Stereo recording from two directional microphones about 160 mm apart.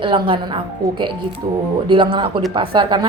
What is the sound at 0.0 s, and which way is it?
A woman's voice, 30° right (ahead or behind).